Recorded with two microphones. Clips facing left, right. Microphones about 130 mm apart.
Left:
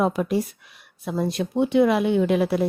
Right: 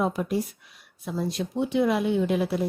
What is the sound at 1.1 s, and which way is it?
Speech, 65° left (ahead or behind).